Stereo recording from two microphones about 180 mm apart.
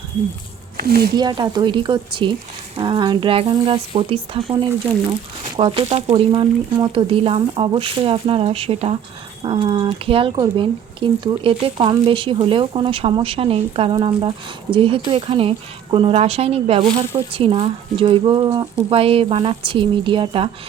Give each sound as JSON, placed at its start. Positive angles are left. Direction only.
{"t": 0.8, "sound": "speech", "side_deg": -60}
{"t": 1.1, "sound": "speech", "side_deg": -25}
{"t": 5.5, "sound": "speech", "side_deg": -30}